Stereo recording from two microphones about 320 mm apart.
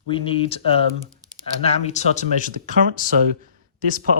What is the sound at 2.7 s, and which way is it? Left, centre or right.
Speech, right.